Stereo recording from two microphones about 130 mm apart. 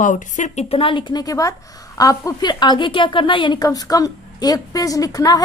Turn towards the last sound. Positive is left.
turn(degrees=30)  # may be behind; listen again after turning